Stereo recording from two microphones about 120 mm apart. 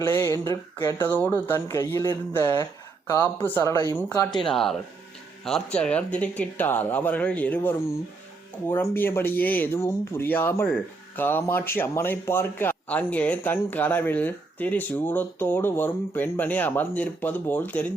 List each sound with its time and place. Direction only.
0.0 s speech: 20° left (ahead or behind)
4.3 s a man's voice: 5° left (ahead or behind)